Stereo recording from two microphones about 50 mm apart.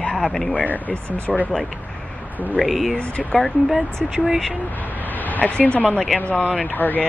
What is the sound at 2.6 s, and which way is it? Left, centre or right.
Speech, centre.